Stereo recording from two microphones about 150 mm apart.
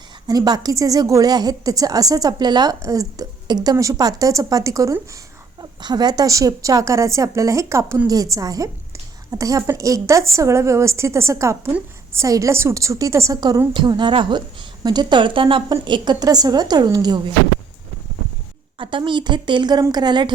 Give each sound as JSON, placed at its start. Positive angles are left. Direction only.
{"t": 0.3, "sound": "a woman's voice", "side_deg": -25}
{"t": 18.8, "sound": "a woman's voice", "side_deg": -35}